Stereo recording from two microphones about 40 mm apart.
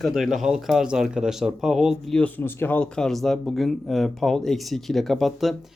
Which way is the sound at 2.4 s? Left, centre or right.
Left.